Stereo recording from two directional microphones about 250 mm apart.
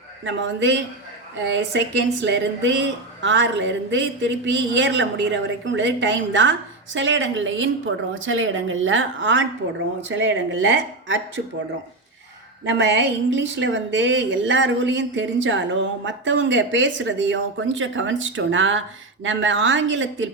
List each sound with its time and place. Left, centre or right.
0.3 s a woman's voice: right
12.6 s a woman's voice: right